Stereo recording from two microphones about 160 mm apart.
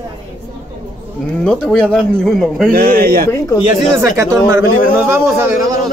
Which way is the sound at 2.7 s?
65° right (ahead or behind).